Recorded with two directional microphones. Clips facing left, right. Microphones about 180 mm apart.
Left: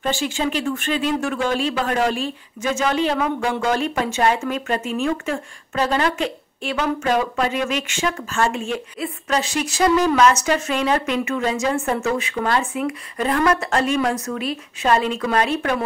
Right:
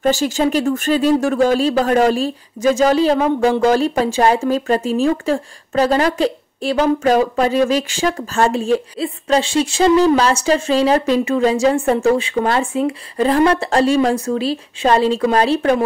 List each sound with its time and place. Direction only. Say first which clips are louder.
0.0 s speech: right 7 dB; 40° right (ahead or behind)